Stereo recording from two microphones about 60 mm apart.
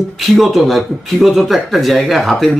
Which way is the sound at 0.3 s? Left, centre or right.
Centre.